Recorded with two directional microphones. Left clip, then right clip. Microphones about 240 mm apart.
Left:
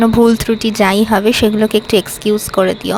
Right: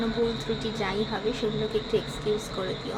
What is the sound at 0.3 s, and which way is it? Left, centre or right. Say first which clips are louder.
Speech: left 15 dB; left.